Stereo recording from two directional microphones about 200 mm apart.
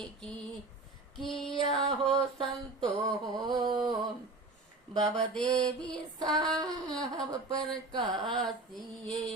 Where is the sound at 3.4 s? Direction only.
20° right (ahead or behind).